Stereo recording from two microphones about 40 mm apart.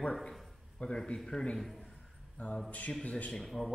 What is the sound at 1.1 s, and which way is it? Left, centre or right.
Speech, centre.